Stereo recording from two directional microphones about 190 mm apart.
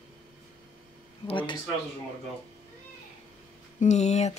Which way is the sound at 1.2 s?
25° left (ahead or behind).